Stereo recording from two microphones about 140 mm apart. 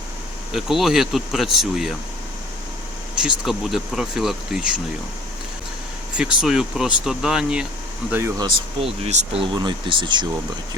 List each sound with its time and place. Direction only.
0.5 s speech: centre (ahead or behind)
3.2 s speech: 5° right (ahead or behind)
6.1 s speech: 5° right (ahead or behind)
8.4 s speech: 35° right (ahead or behind)
9.0 s speech: 50° right (ahead or behind)
9.6 s speech: 35° right (ahead or behind)